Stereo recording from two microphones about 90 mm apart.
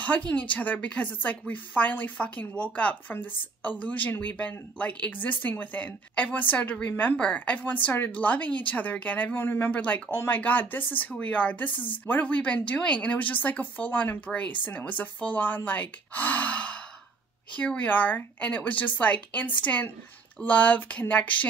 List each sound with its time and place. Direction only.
0.0 s speech: 15° left (ahead or behind)